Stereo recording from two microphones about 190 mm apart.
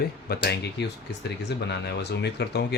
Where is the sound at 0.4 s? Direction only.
60° left (ahead or behind).